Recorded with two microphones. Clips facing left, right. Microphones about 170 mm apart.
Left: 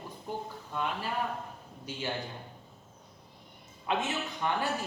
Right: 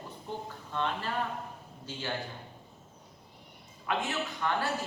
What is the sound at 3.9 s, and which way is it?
Speech, 20° left (ahead or behind).